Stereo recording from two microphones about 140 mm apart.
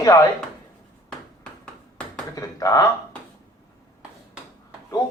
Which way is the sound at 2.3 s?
25° left (ahead or behind).